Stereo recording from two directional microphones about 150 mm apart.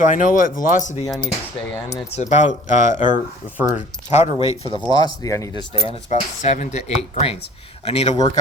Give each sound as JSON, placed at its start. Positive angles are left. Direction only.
{"t": 0.0, "sound": "speech", "side_deg": 60}
{"t": 1.0, "sound": "speech", "side_deg": 0}
{"t": 2.1, "sound": "speech", "side_deg": 50}
{"t": 4.9, "sound": "speech", "side_deg": 25}
{"t": 5.7, "sound": "speech", "side_deg": 45}